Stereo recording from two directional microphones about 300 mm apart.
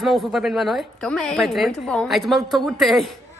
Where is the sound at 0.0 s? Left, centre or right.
Centre.